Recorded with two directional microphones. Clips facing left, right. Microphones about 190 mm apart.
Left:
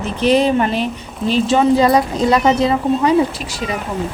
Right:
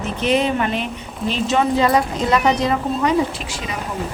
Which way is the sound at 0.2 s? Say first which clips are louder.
Left 5 dB; 35° left (ahead or behind).